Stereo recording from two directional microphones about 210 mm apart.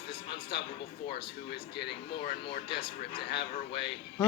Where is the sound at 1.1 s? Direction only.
50° left (ahead or behind).